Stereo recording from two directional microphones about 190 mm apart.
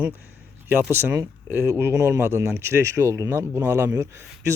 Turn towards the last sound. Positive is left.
turn(degrees=-15)  # may be behind; listen again after turning